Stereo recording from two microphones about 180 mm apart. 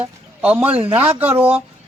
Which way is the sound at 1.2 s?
10° right (ahead or behind).